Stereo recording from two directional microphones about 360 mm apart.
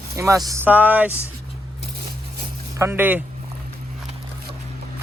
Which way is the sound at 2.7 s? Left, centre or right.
Centre.